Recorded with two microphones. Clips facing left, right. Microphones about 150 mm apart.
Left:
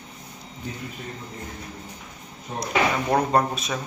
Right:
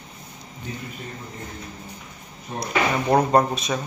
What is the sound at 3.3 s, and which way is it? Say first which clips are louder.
Speech: right 3 dB; centre (ahead or behind).